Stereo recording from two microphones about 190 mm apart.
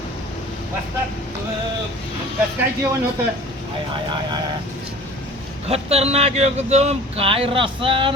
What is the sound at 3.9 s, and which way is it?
Speech, 25° right (ahead or behind).